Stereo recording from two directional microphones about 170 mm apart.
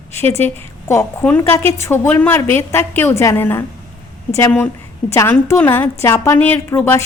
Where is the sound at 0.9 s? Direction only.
15° left (ahead or behind).